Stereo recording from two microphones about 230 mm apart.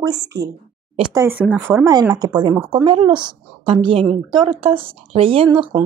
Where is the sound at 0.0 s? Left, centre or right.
Centre.